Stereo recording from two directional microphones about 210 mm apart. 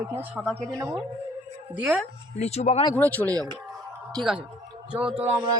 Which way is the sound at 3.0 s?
5° left (ahead or behind).